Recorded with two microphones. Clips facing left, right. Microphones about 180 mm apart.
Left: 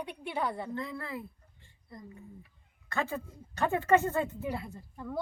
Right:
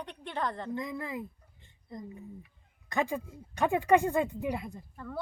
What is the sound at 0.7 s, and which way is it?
A woman's voice, 15° right (ahead or behind).